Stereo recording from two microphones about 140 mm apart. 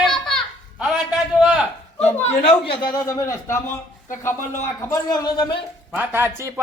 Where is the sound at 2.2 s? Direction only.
50° left (ahead or behind).